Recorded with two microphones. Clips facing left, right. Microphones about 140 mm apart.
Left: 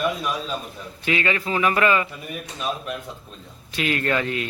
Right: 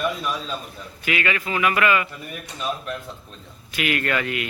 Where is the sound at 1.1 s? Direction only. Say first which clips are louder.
Left 1 dB; 30° left (ahead or behind).